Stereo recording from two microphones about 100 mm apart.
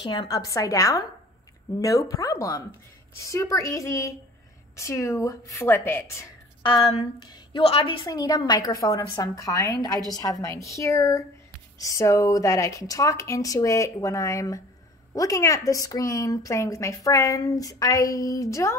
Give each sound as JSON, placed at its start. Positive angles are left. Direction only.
{"t": 0.3, "sound": "a woman's voice", "side_deg": 35}
{"t": 6.6, "sound": "a woman's voice", "side_deg": 50}
{"t": 7.6, "sound": "a woman's voice", "side_deg": 70}
{"t": 8.0, "sound": "a woman's voice", "side_deg": 45}